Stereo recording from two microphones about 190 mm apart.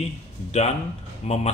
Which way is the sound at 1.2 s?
35° left (ahead or behind).